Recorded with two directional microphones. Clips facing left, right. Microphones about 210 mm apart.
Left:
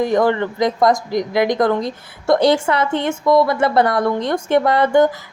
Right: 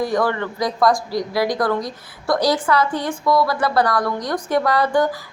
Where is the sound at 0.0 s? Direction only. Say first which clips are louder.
Left 4 dB; 20° left (ahead or behind).